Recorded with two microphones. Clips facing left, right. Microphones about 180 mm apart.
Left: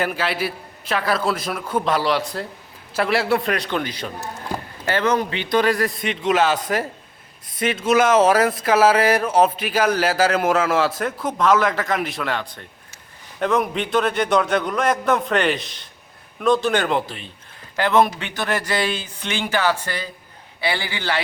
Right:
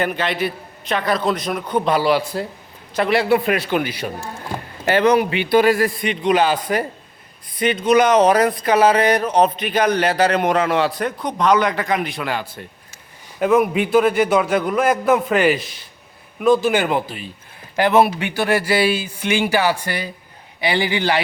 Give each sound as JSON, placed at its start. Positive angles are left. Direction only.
{"t": 0.0, "sound": "speech", "side_deg": 5}